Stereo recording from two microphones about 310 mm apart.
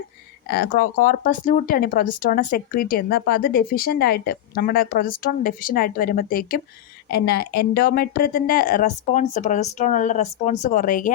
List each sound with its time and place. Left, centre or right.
0.4 s a woman's voice: left